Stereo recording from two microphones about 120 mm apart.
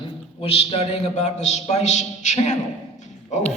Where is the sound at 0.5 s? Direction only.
50° left (ahead or behind); by 2.6 s 75° left (ahead or behind).